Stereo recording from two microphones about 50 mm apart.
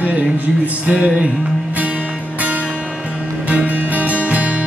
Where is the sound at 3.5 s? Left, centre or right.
Right.